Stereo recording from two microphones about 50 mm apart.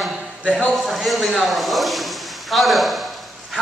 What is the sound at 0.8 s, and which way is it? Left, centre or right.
Speech, centre.